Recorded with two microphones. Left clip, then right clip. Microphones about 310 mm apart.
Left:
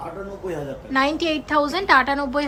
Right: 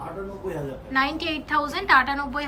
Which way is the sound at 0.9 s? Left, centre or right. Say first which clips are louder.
Left 4 dB; centre.